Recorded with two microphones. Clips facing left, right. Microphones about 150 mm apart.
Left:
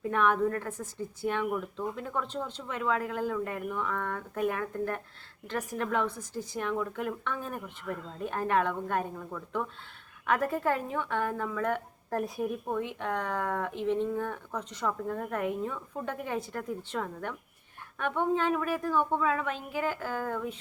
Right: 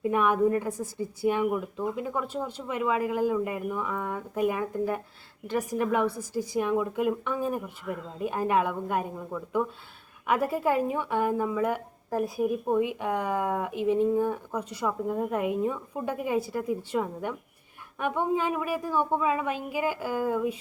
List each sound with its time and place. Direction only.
0.0 s a woman's voice: 10° right (ahead or behind)